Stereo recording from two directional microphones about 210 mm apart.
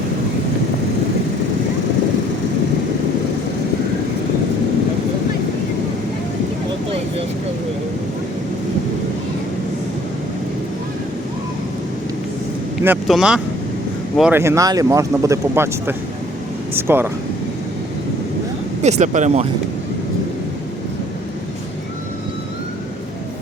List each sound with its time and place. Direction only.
12.8 s speech: 5° right (ahead or behind)
18.8 s speech: 35° right (ahead or behind)